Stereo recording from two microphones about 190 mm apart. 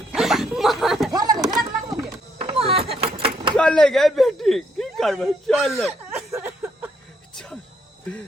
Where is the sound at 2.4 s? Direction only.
30° right (ahead or behind).